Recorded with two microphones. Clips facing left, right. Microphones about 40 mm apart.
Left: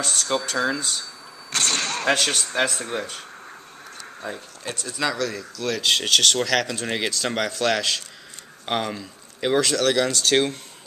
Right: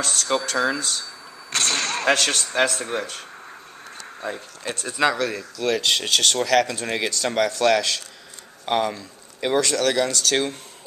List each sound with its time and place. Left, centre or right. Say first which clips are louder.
0.0 s speech: right 1 dB; centre
0.7 s speech: right 1 dB; centre
1.5 s whip: right 1 dB; centre
2.1 s speech: right 1 dB; centre
10.1 s speech: left 2 dB; centre